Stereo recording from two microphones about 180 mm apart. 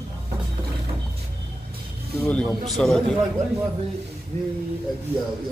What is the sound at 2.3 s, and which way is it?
Speech, 5° left (ahead or behind).